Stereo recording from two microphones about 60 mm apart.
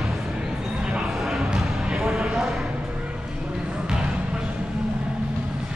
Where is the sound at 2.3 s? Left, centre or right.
Centre.